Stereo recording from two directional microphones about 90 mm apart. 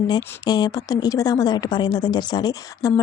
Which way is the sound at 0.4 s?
50° left (ahead or behind).